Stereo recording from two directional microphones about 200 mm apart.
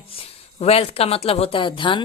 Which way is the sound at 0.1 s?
30° left (ahead or behind).